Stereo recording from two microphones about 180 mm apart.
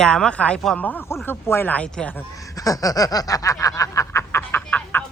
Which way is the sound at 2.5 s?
20° left (ahead or behind).